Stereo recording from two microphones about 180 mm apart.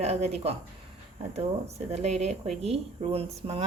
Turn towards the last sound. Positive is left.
turn(degrees=-35)  # may be behind; listen again after turning